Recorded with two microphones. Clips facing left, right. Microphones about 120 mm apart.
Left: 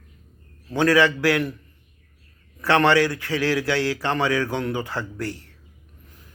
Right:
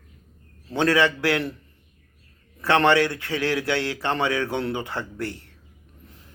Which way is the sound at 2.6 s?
20° right (ahead or behind).